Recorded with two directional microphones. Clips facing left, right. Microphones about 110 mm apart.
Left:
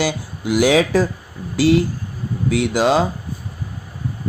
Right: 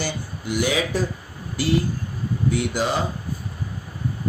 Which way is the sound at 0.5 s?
90° left.